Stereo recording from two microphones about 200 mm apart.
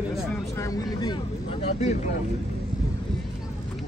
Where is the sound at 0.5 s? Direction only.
15° left (ahead or behind).